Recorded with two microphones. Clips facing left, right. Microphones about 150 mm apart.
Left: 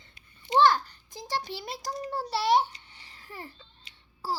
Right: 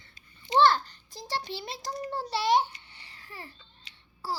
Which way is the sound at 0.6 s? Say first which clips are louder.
Even; 10° left (ahead or behind).